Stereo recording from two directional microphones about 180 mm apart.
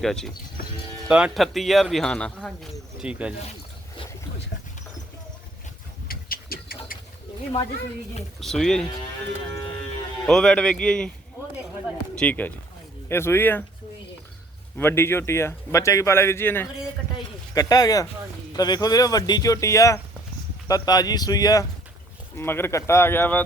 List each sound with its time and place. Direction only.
0.0 s speech: centre (ahead or behind)
3.0 s speech: 5° right (ahead or behind)
6.1 s vehicle: 55° left (ahead or behind)
8.4 s speech: centre (ahead or behind)
10.2 s speech: 5° left (ahead or behind)
12.1 s speech: 10° left (ahead or behind)
14.8 s speech: 10° left (ahead or behind)